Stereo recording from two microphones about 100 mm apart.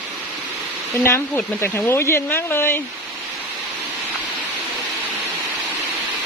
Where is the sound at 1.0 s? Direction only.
25° left (ahead or behind).